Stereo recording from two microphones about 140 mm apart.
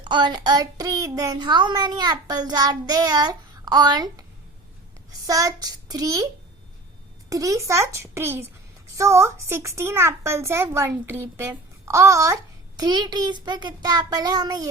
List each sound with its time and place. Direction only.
0.0 s a child's voice: 35° right (ahead or behind)
7.3 s a child's voice: 25° right (ahead or behind)